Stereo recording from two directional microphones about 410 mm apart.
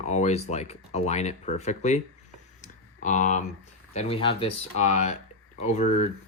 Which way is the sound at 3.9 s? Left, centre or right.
Centre.